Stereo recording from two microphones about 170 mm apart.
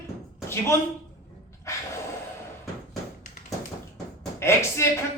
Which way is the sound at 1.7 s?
20° left (ahead or behind).